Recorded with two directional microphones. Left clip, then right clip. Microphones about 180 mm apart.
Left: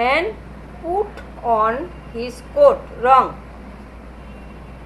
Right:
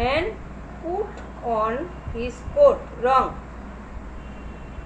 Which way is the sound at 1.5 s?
30° left (ahead or behind).